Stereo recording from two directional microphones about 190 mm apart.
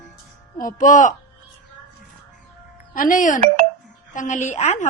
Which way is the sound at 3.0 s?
45° left (ahead or behind).